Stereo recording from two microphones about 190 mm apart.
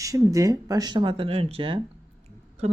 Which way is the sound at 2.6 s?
35° right (ahead or behind).